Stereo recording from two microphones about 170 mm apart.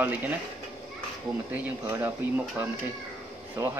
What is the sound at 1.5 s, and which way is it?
Speech, 10° right (ahead or behind).